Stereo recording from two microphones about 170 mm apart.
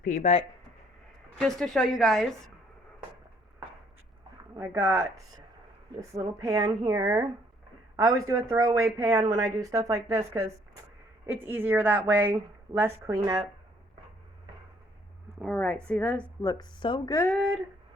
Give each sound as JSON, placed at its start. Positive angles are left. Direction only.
{"t": 0.2, "sound": "speech", "side_deg": 40}
{"t": 1.4, "sound": "a woman's voice", "side_deg": 0}
{"t": 4.5, "sound": "a woman's voice", "side_deg": -15}
{"t": 15.4, "sound": "speech", "side_deg": 10}
{"t": 16.4, "sound": "speech", "side_deg": 20}